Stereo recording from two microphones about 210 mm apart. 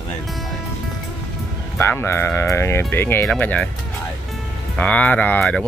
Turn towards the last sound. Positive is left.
turn(degrees=5)  # may be behind; listen again after turning